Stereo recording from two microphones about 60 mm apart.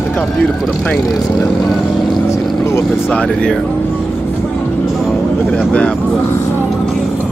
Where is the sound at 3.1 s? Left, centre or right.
Centre.